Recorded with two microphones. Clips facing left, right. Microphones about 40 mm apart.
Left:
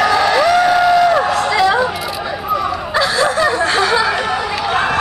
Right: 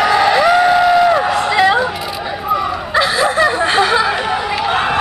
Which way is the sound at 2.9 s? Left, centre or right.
Centre.